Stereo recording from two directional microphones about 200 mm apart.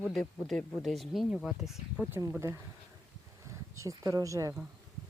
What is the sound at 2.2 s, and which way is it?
Speech, 15° right (ahead or behind).